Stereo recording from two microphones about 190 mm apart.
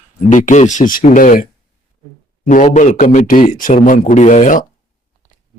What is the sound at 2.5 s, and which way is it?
Speech, 40° left (ahead or behind).